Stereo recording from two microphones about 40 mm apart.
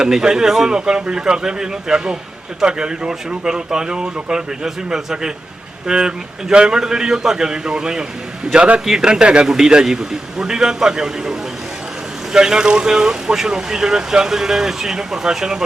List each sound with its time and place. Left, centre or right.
0.0 s a man's voice: centre
8.5 s a man's voice: right
8.8 s a man's voice: centre